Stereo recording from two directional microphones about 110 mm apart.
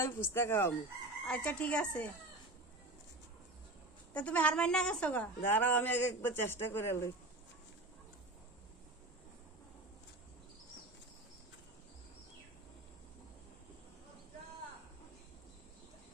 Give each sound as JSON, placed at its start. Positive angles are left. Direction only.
{"t": 0.0, "sound": "a woman's voice", "side_deg": 20}
{"t": 1.2, "sound": "chicken", "side_deg": 10}
{"t": 4.1, "sound": "a woman's voice", "side_deg": 15}